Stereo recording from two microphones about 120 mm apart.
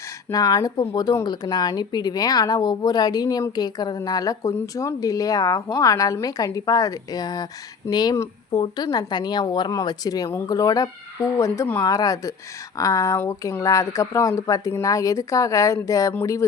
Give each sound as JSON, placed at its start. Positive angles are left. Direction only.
{"t": 0.3, "sound": "speech", "side_deg": 30}